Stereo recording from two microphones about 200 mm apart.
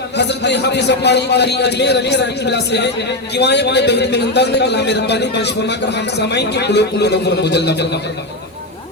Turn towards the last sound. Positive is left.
turn(degrees=55)  # may be behind; listen again after turning